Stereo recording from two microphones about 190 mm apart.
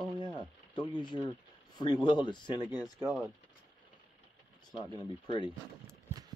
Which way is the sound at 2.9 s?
5° right (ahead or behind).